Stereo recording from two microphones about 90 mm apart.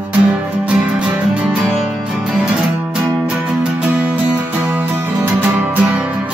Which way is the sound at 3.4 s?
15° right (ahead or behind).